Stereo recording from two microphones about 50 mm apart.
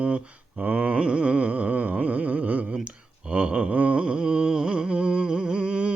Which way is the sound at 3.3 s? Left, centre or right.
Right.